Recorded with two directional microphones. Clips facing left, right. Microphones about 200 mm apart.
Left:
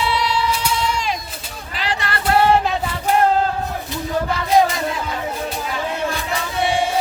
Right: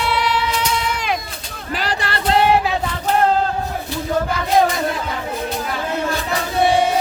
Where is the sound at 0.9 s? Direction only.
55° right (ahead or behind).